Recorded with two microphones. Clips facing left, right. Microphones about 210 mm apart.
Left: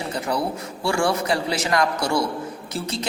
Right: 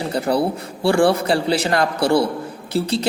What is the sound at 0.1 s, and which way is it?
A man's voice, 35° right (ahead or behind).